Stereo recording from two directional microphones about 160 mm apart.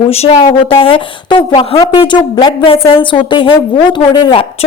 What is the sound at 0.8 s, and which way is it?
A woman's voice, 35° left (ahead or behind).